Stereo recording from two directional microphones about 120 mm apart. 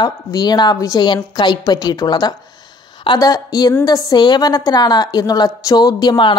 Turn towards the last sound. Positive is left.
turn(degrees=40)  # may be behind; listen again after turning